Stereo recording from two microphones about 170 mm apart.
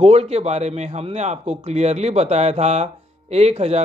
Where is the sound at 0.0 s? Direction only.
35° right (ahead or behind).